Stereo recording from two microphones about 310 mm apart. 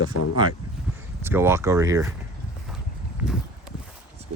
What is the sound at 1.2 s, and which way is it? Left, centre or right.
Speech, centre.